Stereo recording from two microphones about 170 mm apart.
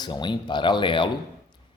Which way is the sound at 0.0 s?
25° left (ahead or behind).